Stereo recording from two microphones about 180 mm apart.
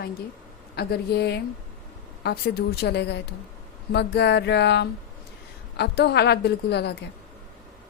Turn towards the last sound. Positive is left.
turn(degrees=65)  # may be behind; listen again after turning